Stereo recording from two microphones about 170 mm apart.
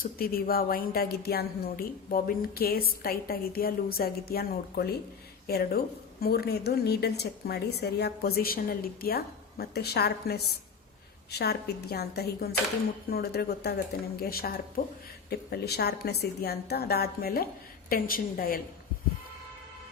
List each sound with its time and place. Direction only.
0.0 s a woman's voice: 60° left (ahead or behind)